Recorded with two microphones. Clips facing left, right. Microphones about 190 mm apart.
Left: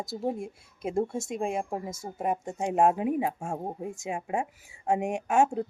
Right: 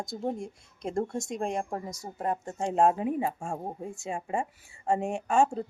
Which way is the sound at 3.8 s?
20° left (ahead or behind).